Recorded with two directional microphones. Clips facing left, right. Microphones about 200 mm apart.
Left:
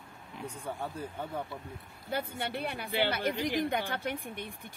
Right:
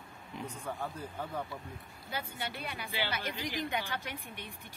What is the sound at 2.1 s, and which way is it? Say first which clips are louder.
Speech: left 5 dB; 55° left (ahead or behind).